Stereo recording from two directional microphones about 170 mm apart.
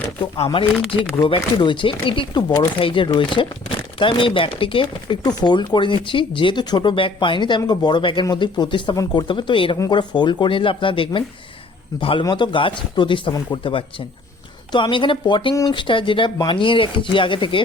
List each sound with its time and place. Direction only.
0.3 s speech: 30° left (ahead or behind)